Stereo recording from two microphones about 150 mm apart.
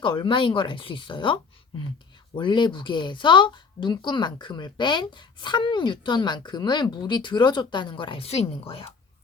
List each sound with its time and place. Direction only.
0.0 s a woman's voice: 35° left (ahead or behind)